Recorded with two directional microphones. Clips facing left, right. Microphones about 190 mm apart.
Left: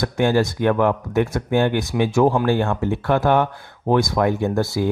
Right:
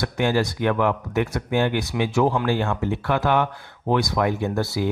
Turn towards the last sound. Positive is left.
turn(degrees=50)  # may be behind; listen again after turning